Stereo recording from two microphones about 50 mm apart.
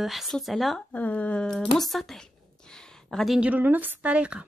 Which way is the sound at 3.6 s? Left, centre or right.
Right.